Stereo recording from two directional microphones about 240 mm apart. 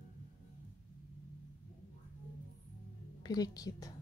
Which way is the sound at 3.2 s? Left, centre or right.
Centre.